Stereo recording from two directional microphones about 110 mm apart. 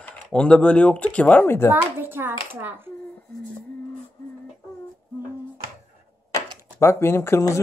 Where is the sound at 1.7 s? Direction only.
20° right (ahead or behind).